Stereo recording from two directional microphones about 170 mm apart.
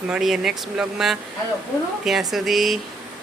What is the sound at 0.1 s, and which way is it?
Speech, centre (ahead or behind).